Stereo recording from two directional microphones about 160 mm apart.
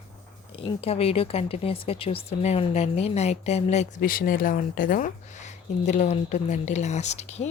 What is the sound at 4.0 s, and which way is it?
Speech, 65° left (ahead or behind).